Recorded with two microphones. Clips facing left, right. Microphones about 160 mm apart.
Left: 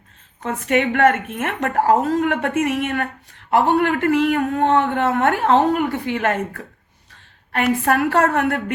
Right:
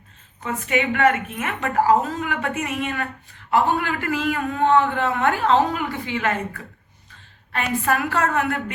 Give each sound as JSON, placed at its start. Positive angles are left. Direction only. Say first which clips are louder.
{"t": 0.4, "sound": "a woman's voice", "louder": "left 4 dB", "side_deg": 65}
{"t": 7.5, "sound": "a woman's voice", "louder": "left 4 dB", "side_deg": 60}